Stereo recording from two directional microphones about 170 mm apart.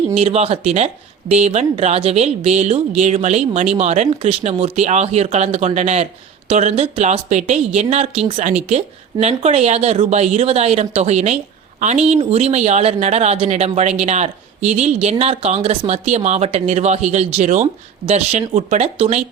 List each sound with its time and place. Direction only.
0.2 s speech: 40° right (ahead or behind)